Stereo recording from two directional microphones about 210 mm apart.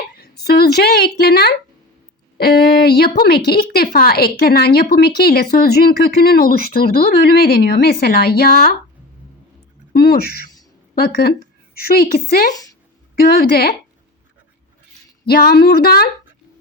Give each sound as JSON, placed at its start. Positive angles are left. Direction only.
{"t": 0.1, "sound": "a woman's voice", "side_deg": 50}
{"t": 9.9, "sound": "a woman's voice", "side_deg": 45}
{"t": 15.3, "sound": "a woman's voice", "side_deg": 45}